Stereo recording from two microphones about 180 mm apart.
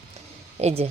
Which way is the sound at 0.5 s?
35° right (ahead or behind).